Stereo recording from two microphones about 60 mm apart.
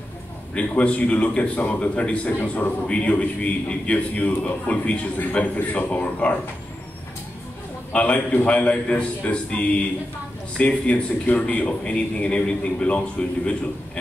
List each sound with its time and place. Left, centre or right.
0.6 s a man's voice: centre
7.9 s a man's voice: left